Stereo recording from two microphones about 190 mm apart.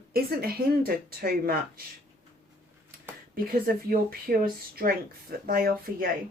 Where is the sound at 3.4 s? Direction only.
50° right (ahead or behind).